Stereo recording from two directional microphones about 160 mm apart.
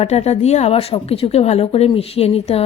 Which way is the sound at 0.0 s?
40° left (ahead or behind).